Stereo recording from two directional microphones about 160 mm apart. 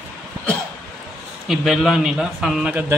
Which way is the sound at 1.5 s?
Centre (ahead or behind).